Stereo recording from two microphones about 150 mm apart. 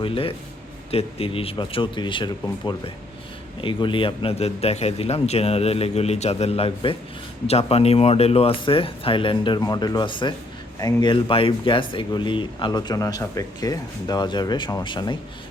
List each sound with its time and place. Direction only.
0.0 s a man's voice: 35° left (ahead or behind)